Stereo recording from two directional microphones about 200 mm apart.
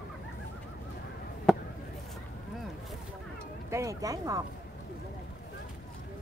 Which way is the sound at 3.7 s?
15° right (ahead or behind).